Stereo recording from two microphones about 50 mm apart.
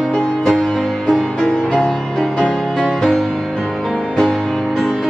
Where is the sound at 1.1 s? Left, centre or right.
Centre.